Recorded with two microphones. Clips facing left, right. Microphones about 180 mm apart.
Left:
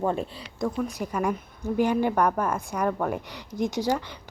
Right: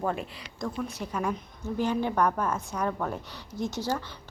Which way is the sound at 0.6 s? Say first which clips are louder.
Left 5 dB; 10° left (ahead or behind).